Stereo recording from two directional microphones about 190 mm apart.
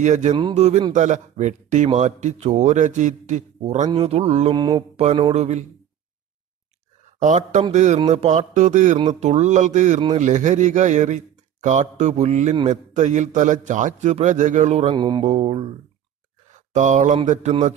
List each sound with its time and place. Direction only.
0.0 s speech: 40° right (ahead or behind)
4.6 s mantra: 25° right (ahead or behind)
5.3 s speech: 35° right (ahead or behind)
7.2 s speech: 40° right (ahead or behind)
15.0 s speech: 25° right (ahead or behind)
16.7 s speech: 40° right (ahead or behind)